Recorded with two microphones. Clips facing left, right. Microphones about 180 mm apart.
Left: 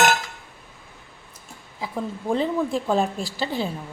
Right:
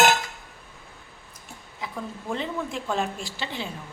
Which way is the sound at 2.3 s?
35° left (ahead or behind).